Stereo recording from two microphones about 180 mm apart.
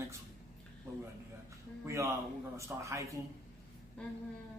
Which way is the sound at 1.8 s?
15° right (ahead or behind).